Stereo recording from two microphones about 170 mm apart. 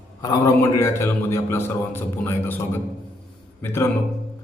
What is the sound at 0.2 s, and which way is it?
A man's voice, 20° left (ahead or behind).